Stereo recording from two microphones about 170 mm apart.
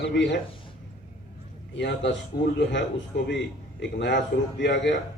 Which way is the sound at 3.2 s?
90° left.